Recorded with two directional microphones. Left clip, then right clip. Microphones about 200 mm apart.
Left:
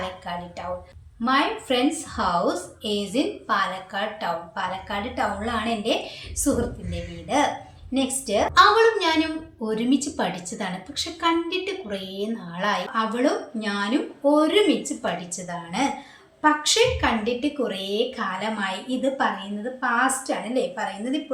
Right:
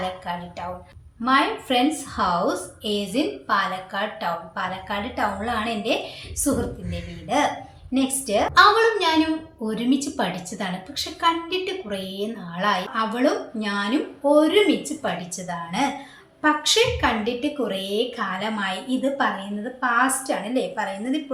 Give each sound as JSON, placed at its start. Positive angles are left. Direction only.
{"t": 1.2, "sound": "a woman's voice", "side_deg": 0}